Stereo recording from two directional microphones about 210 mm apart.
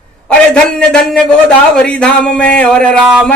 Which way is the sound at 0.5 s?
5° left (ahead or behind).